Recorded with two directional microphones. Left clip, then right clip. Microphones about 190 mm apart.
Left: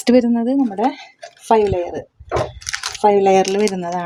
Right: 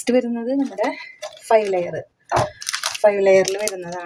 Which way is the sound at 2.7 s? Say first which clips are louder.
Even; 20° left (ahead or behind).